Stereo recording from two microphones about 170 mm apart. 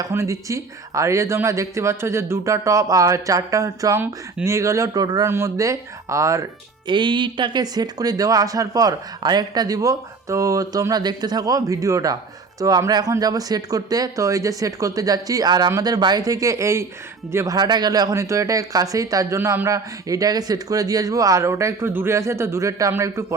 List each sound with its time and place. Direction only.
0.0 s speech: 15° right (ahead or behind)